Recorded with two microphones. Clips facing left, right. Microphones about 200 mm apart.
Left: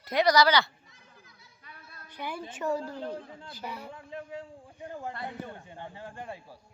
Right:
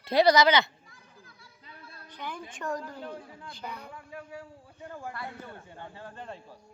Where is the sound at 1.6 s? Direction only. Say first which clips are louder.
Right 2 dB; 25° right (ahead or behind).